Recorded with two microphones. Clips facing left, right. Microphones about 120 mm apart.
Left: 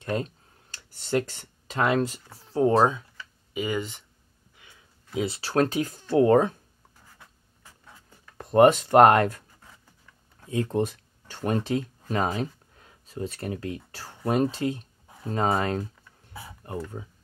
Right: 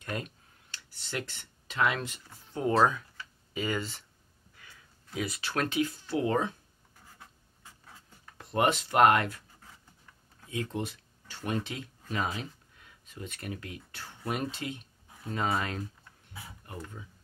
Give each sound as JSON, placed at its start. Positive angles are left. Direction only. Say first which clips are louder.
{"t": 0.0, "sound": "tick-tock", "louder": "left 8 dB", "side_deg": 30}
{"t": 0.9, "sound": "speech", "louder": "left 11 dB", "side_deg": 40}
{"t": 8.4, "sound": "speech", "louder": "left 10 dB", "side_deg": 45}
{"t": 10.5, "sound": "speech", "louder": "left 8 dB", "side_deg": 40}